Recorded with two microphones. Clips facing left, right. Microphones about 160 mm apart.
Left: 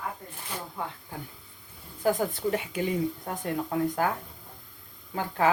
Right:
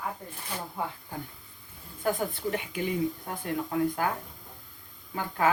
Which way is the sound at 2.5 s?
30° left (ahead or behind).